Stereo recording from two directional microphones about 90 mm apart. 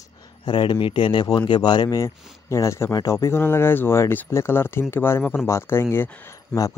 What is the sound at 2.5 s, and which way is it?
Speech, 35° left (ahead or behind).